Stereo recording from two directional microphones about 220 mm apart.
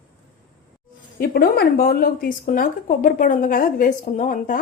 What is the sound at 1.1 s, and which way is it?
Speech, 45° left (ahead or behind).